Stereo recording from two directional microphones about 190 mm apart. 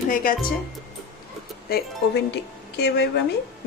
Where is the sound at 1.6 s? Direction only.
55° left (ahead or behind).